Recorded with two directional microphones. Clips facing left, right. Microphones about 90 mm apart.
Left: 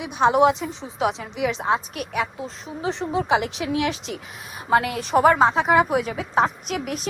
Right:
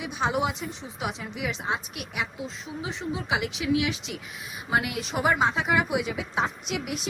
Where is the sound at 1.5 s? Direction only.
35° left (ahead or behind).